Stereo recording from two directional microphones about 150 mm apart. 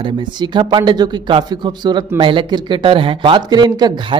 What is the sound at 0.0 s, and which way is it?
Speech, 30° right (ahead or behind).